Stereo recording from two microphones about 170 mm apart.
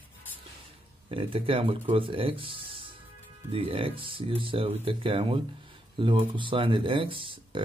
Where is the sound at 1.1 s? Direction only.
30° right (ahead or behind).